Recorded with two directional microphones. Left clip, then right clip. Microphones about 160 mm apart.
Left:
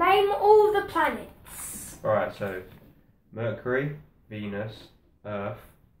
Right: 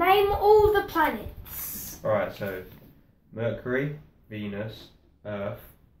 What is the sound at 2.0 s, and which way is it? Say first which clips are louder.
Speech: left 1 dB; 20° left (ahead or behind).